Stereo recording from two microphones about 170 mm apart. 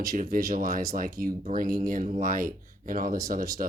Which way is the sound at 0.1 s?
55° right (ahead or behind).